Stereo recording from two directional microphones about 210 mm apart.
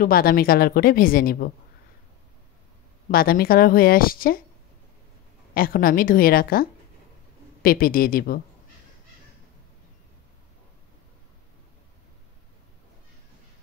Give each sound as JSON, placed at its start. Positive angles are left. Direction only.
{"t": 0.0, "sound": "a woman's voice", "side_deg": 45}
{"t": 3.1, "sound": "a woman's voice", "side_deg": 45}
{"t": 5.5, "sound": "a woman's voice", "side_deg": 45}